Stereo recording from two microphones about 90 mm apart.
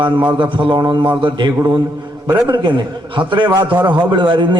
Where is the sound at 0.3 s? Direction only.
60° right (ahead or behind).